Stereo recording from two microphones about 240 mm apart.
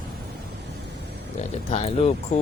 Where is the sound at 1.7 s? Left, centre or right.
Left.